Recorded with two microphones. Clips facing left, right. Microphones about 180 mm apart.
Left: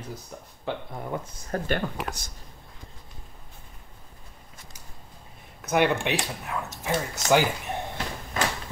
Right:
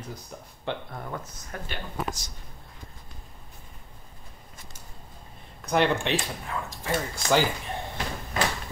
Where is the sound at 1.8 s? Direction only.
55° left (ahead or behind).